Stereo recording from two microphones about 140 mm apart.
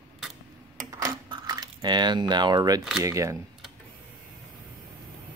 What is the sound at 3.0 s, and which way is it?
Speech, 20° right (ahead or behind).